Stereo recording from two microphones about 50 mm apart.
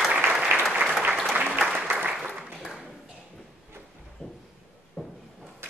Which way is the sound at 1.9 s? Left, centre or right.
Right.